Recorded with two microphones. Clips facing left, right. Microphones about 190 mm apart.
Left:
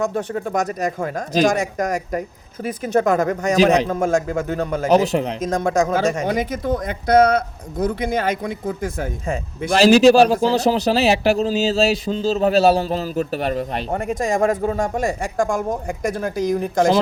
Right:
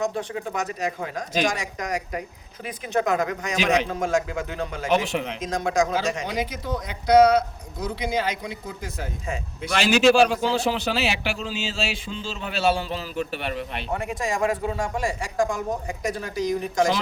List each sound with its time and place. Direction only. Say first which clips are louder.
0.0 s a man's voice: left 5 dB; 50° left (ahead or behind)
9.7 s a man's voice: left 7 dB; 35° left (ahead or behind)